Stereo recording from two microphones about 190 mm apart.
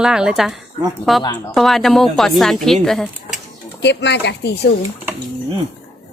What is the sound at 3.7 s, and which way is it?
Speech, 65° left (ahead or behind).